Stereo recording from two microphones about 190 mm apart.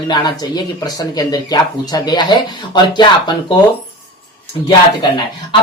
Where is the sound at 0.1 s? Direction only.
25° left (ahead or behind).